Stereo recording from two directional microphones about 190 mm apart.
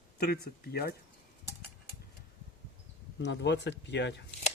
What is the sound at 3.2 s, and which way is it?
Speech, 65° left (ahead or behind).